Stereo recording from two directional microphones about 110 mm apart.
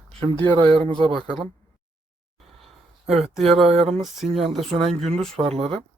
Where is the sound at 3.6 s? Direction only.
65° right (ahead or behind).